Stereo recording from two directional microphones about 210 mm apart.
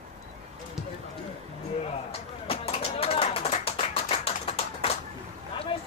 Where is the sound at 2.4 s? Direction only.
30° left (ahead or behind).